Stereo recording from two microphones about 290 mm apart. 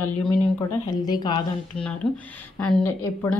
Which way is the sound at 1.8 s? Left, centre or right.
Centre.